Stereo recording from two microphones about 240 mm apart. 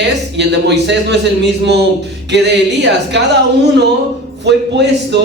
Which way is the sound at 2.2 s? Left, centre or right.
Right.